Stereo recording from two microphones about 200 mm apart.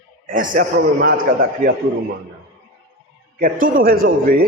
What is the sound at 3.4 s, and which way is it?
A man's voice, 45° right (ahead or behind).